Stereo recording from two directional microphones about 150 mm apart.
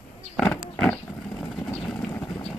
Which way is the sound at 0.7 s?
15° left (ahead or behind).